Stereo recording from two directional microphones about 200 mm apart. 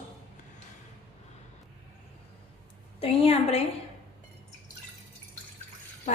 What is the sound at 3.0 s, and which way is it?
Speech, 30° left (ahead or behind).